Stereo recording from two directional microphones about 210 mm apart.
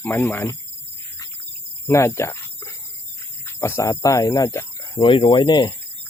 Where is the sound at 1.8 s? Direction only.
15° left (ahead or behind).